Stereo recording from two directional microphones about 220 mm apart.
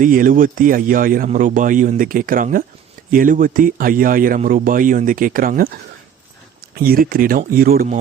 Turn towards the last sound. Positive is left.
turn(degrees=-40)  # may be behind; listen again after turning